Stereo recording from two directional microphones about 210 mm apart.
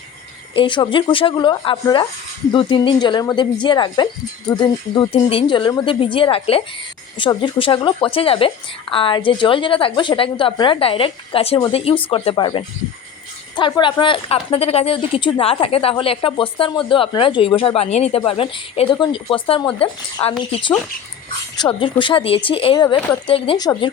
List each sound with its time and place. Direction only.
0.5 s a woman's voice: 25° left (ahead or behind)